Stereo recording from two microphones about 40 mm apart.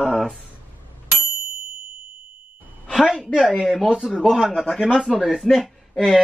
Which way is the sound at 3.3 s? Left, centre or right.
Left.